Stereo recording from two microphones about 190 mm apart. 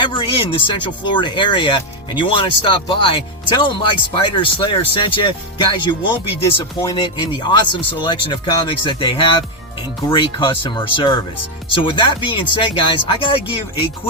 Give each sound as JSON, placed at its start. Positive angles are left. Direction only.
{"t": 0.0, "sound": "speech", "side_deg": 25}